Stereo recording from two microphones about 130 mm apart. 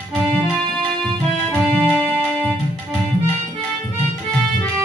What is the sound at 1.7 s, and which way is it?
Music, 15° right (ahead or behind).